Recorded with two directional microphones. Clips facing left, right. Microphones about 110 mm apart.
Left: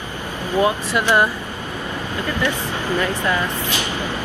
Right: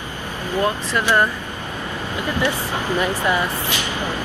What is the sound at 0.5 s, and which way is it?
Speech, 15° left (ahead or behind).